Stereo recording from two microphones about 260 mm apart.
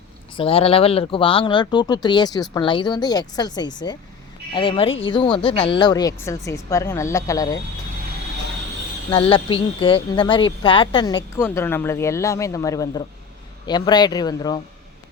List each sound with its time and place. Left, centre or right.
0.3 s speech: left
9.0 s speech: centre